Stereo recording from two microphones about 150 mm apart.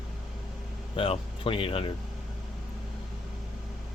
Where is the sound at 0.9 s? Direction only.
40° left (ahead or behind).